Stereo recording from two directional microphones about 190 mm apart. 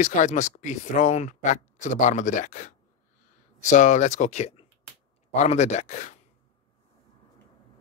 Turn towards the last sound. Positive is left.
turn(degrees=40)  # may be behind; listen again after turning